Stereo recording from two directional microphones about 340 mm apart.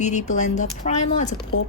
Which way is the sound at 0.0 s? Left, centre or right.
Left.